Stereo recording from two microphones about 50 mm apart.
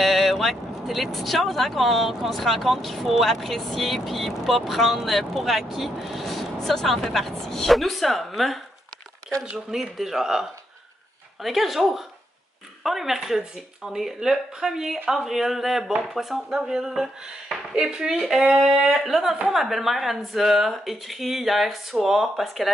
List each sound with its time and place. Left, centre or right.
0.0 s speech: centre
9.7 s speech: centre
11.4 s speech: centre